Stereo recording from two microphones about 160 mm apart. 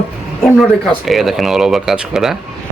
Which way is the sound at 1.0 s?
Centre (ahead or behind).